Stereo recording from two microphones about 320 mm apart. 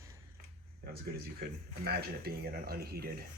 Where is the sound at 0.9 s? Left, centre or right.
Right.